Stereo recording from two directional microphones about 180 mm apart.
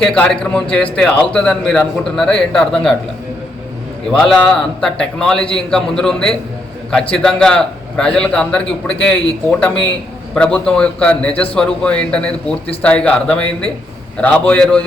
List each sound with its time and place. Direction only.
0.0 s a man's voice: 5° left (ahead or behind)
4.1 s a man's voice: 5° left (ahead or behind)